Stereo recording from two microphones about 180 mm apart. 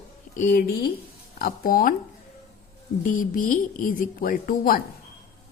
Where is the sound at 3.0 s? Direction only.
50° left (ahead or behind).